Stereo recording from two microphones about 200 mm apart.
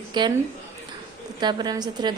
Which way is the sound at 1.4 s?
20° right (ahead or behind).